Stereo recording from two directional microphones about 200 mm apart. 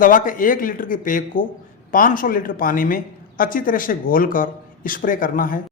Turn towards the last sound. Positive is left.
turn(degrees=45)  # may be behind; listen again after turning